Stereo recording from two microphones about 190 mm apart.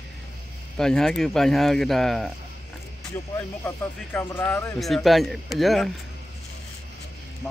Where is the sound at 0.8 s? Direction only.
5° left (ahead or behind).